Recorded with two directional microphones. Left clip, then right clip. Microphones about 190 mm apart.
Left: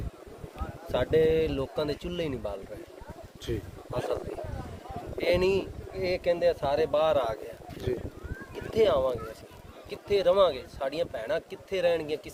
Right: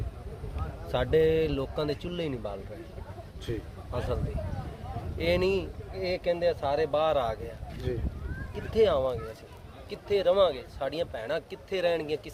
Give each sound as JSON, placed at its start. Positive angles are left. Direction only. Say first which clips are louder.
{"t": 0.9, "sound": "speech", "louder": "even", "side_deg": 5}
{"t": 3.5, "sound": "speech", "louder": "left 2 dB", "side_deg": 50}
{"t": 3.9, "sound": "speech", "louder": "left 2 dB", "side_deg": 10}
{"t": 7.9, "sound": "speech", "louder": "left 2 dB", "side_deg": 50}
{"t": 8.7, "sound": "speech", "louder": "even", "side_deg": 5}